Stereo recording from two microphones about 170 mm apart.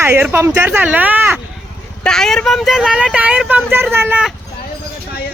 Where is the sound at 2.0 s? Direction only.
5° left (ahead or behind).